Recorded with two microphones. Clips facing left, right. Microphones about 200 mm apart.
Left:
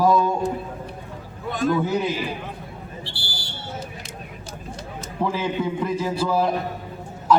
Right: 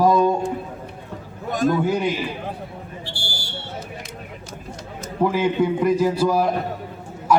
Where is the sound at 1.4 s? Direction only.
45° right (ahead or behind).